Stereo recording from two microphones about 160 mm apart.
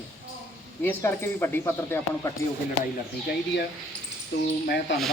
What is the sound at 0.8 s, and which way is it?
Speech, 15° left (ahead or behind).